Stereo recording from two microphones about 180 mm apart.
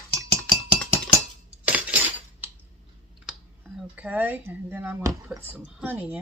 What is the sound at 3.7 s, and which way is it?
Speech, 5° right (ahead or behind).